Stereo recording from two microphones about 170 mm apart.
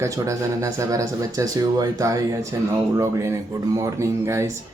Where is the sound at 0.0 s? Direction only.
20° right (ahead or behind).